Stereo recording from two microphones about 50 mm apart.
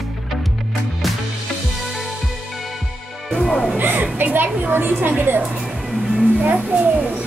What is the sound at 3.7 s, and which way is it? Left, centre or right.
A woman's voice, right.